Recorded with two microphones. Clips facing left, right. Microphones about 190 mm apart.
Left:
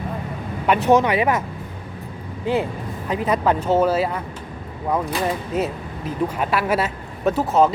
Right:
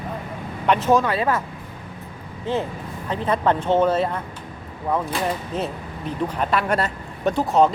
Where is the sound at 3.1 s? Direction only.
10° left (ahead or behind).